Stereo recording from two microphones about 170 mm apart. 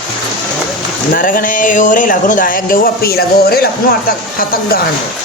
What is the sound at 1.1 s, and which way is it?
Speech, 55° left (ahead or behind).